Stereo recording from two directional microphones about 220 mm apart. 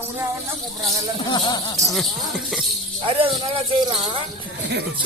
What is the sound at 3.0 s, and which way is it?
Speech, 25° right (ahead or behind).